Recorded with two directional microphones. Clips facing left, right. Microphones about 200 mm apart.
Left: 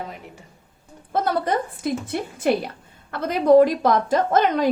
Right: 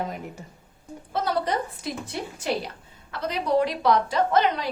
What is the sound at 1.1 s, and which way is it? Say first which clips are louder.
A woman's voice: left 4 dB; 50° left (ahead or behind).